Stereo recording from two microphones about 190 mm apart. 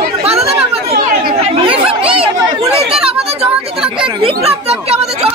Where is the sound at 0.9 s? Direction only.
50° right (ahead or behind).